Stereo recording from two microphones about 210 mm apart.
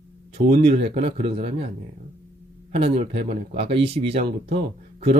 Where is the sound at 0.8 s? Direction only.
30° right (ahead or behind).